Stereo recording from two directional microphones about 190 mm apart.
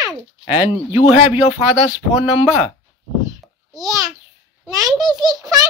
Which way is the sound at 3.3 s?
20° right (ahead or behind).